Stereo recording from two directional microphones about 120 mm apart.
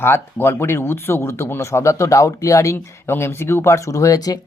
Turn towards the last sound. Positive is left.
turn(degrees=30)  # may be behind; listen again after turning